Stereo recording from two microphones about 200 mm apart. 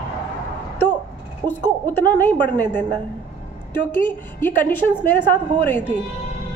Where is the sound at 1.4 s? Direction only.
25° right (ahead or behind).